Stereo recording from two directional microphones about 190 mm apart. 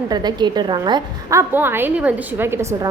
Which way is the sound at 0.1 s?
20° right (ahead or behind).